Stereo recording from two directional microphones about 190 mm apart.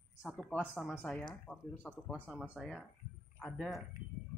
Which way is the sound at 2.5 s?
5° right (ahead or behind).